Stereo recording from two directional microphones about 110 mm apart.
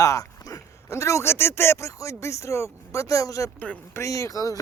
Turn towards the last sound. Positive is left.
turn(degrees=30)  # may be behind; listen again after turning